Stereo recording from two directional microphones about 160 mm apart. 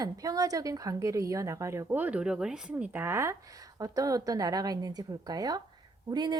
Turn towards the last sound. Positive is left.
turn(degrees=-25)  # may be behind; listen again after turning